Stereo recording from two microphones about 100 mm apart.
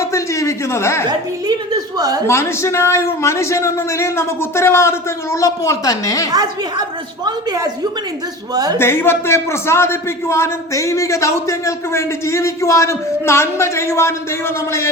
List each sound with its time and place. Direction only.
0.0 s a sound: 30° left (ahead or behind)
1.5 s a woman's voice: 40° right (ahead or behind)
2.2 s a man's voice: 25° left (ahead or behind)
6.3 s a woman's voice: 40° right (ahead or behind)
8.8 s a man's voice: 25° left (ahead or behind)